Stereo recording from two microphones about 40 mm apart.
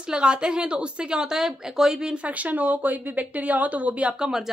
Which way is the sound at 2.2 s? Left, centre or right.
Right.